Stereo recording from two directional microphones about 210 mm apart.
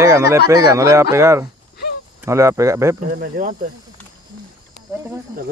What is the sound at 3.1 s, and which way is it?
Speech, 40° right (ahead or behind).